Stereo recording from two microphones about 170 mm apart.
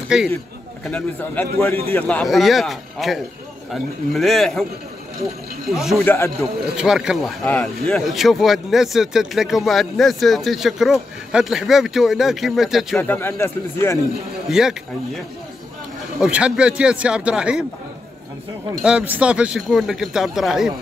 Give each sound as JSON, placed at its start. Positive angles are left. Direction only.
{"t": 0.1, "sound": "speech", "side_deg": -5}
{"t": 0.8, "sound": "speech", "side_deg": 10}
{"t": 6.0, "sound": "speech", "side_deg": 15}
{"t": 6.8, "sound": "speech", "side_deg": -5}
{"t": 12.9, "sound": "speech", "side_deg": 10}
{"t": 14.5, "sound": "speech", "side_deg": -5}
{"t": 18.8, "sound": "speech", "side_deg": -5}